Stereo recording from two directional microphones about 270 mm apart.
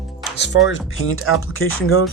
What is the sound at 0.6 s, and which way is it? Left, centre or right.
Speech, left.